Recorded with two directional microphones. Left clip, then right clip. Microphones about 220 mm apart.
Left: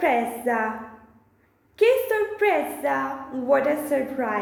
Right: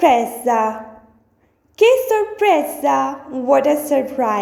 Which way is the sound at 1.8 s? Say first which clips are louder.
Right 6 dB; 30° right (ahead or behind).